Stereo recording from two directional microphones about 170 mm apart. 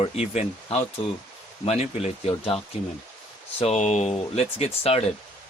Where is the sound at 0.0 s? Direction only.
35° left (ahead or behind).